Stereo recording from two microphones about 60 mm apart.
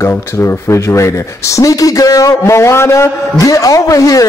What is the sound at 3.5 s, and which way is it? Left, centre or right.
Speech, left.